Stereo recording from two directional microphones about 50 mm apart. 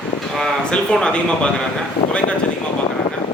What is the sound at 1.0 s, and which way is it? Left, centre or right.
Speech, centre.